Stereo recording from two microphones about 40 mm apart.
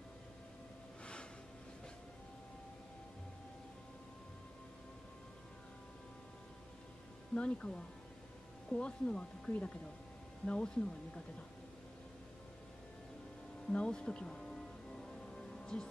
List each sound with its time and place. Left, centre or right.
7.3 s speech: left
13.7 s speech: left
14.5 s music: centre